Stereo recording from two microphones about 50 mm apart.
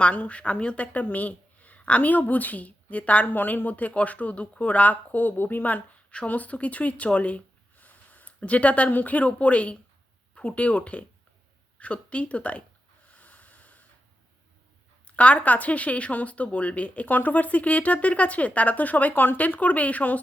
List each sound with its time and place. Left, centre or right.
0.0 s speech: left
13.1 s a sound: left
15.0 s speech: left